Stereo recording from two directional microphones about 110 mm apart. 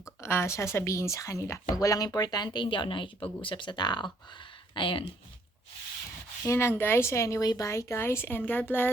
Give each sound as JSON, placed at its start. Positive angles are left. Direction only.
{"t": 0.0, "sound": "speech", "side_deg": 25}
{"t": 6.4, "sound": "speech", "side_deg": 25}